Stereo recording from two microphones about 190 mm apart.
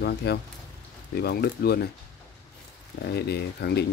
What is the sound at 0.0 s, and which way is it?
Speech, 60° left (ahead or behind).